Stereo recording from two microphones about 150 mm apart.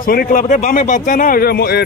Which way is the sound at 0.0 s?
75° left (ahead or behind).